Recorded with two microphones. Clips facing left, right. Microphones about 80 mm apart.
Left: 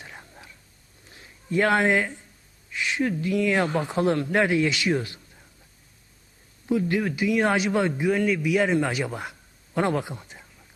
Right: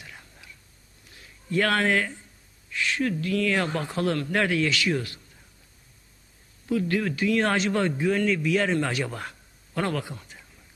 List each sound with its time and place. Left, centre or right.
0.0 s whispering: left
1.1 s a man's voice: left
6.7 s a man's voice: centre